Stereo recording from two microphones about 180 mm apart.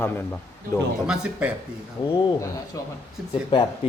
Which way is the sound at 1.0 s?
5° right (ahead or behind).